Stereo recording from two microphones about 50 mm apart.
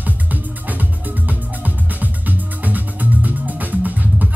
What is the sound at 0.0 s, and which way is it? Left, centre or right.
Music, right.